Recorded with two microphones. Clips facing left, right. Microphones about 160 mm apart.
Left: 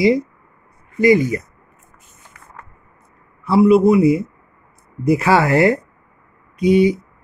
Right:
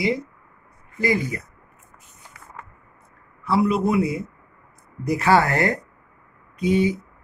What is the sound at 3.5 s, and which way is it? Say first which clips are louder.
A man's voice: left 8 dB; 5° left (ahead or behind).